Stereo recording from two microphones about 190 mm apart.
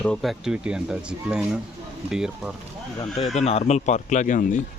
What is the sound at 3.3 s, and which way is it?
Speech, 35° left (ahead or behind).